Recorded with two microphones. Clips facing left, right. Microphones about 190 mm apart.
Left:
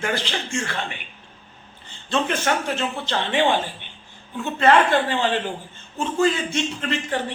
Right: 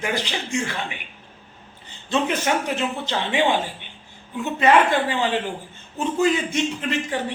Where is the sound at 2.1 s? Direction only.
15° right (ahead or behind).